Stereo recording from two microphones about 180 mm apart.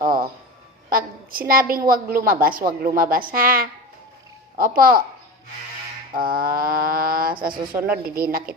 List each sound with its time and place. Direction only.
0.0 s a sound: 50° right (ahead or behind)
0.9 s a woman's voice: 50° right (ahead or behind)
6.1 s a woman's voice: 55° right (ahead or behind)